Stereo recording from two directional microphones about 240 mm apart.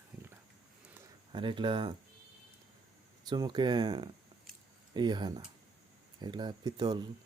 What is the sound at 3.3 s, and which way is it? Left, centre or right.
Speech, centre.